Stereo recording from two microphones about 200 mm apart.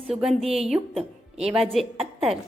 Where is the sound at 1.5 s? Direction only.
Centre (ahead or behind).